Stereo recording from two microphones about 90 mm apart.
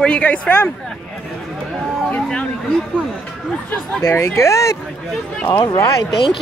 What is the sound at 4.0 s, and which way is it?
Speech, 25° left (ahead or behind).